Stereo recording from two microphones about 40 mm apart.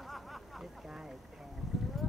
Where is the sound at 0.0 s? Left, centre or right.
Centre.